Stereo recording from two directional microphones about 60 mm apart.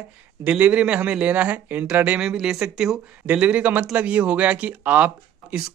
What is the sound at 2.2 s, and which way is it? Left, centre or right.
Speech, centre.